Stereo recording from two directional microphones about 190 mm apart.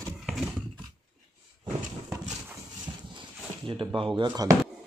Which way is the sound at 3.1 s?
25° right (ahead or behind).